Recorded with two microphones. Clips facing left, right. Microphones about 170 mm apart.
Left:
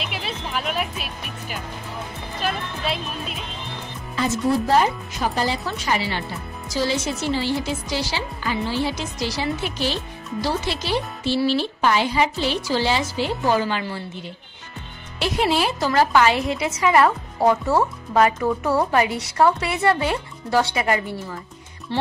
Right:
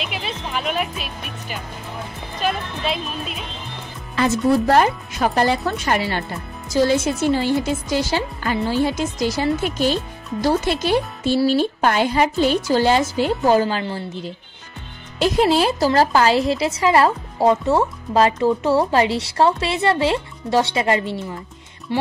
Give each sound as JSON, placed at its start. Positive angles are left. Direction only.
{"t": 0.1, "sound": "music", "side_deg": 5}
{"t": 2.4, "sound": "speech", "side_deg": 0}
{"t": 4.1, "sound": "a woman's voice", "side_deg": -65}